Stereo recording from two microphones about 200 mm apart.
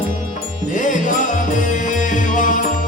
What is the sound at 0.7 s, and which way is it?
Music, 40° left (ahead or behind).